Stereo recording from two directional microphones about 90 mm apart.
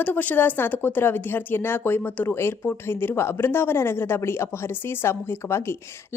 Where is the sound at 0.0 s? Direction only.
20° left (ahead or behind).